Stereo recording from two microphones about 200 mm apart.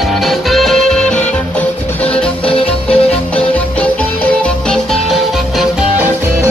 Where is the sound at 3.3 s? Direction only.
5° left (ahead or behind).